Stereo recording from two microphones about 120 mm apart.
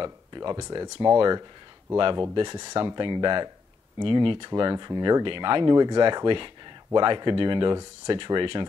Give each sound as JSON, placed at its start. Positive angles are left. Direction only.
{"t": 0.0, "sound": "speech", "side_deg": -40}